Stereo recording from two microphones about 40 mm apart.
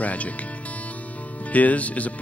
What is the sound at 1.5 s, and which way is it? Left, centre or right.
Speech, left.